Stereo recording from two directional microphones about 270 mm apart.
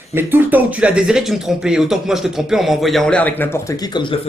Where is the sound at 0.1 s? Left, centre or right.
Centre.